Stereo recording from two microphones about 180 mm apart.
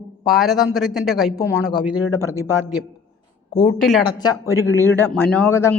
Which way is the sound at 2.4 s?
10° right (ahead or behind).